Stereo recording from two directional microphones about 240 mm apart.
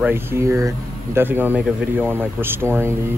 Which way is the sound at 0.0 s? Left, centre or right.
Centre.